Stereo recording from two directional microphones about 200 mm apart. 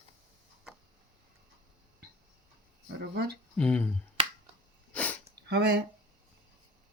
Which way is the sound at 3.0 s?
55° right (ahead or behind).